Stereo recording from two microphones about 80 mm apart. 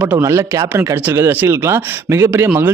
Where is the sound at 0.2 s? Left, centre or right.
Right.